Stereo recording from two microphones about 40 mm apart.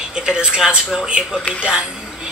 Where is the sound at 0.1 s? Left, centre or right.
Right.